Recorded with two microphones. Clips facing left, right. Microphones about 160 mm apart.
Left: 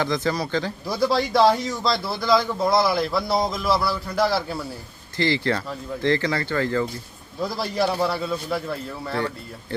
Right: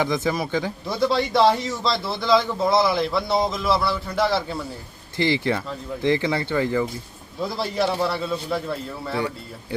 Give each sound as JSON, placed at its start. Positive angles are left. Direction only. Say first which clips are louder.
{"t": 0.0, "sound": "speech", "louder": "right 1 dB", "side_deg": -20}
{"t": 0.9, "sound": "a man's voice", "louder": "even", "side_deg": 0}
{"t": 5.1, "sound": "speech", "louder": "right 1 dB", "side_deg": -20}
{"t": 7.3, "sound": "a man's voice", "louder": "even", "side_deg": 0}